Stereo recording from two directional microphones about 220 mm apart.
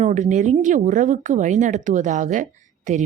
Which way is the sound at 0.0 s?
35° right (ahead or behind).